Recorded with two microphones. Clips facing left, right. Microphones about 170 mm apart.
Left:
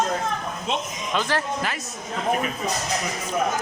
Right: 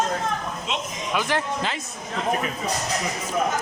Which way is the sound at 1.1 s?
15° right (ahead or behind).